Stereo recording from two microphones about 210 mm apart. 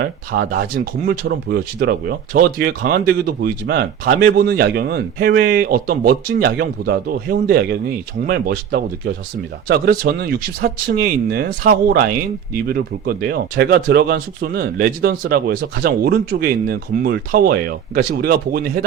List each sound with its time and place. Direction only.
0.0 s speech: 45° right (ahead or behind)